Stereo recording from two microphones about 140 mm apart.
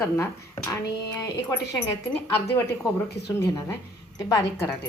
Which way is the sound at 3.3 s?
20° left (ahead or behind).